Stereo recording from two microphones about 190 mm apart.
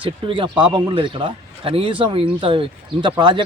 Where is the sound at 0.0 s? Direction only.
25° right (ahead or behind).